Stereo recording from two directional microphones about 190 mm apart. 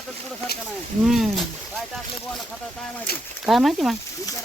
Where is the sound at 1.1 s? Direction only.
Centre (ahead or behind).